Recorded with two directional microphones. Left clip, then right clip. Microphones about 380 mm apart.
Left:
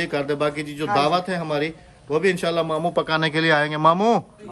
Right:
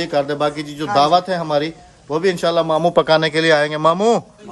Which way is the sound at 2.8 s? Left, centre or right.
Right.